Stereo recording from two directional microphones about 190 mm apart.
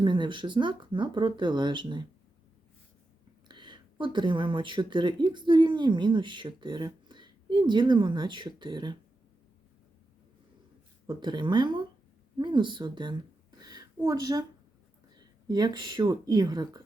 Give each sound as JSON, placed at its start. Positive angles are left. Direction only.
{"t": 0.0, "sound": "speech", "side_deg": -25}
{"t": 3.5, "sound": "speech", "side_deg": -25}
{"t": 11.0, "sound": "speech", "side_deg": -25}
{"t": 13.6, "sound": "a sound", "side_deg": -20}
{"t": 15.1, "sound": "speech", "side_deg": -20}